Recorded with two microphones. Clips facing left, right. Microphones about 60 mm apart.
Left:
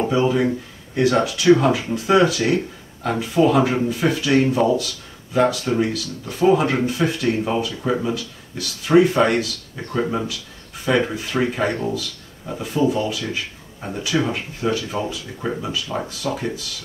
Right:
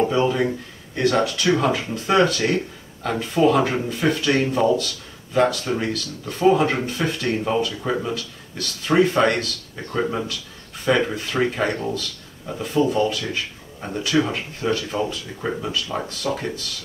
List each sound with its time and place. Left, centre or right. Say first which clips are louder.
0.1 s speech: left 2 dB; centre